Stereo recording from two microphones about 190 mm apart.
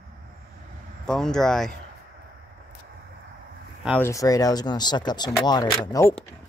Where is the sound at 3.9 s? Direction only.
15° left (ahead or behind).